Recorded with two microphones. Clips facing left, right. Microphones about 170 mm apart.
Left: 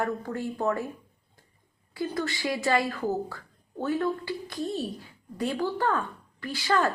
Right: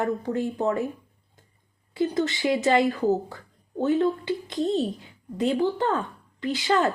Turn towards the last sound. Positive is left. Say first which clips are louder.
# right 3 dB
turn(degrees=-20)  # may be behind; listen again after turning